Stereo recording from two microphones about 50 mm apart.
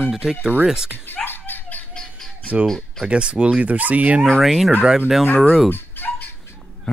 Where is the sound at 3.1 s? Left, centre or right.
Centre.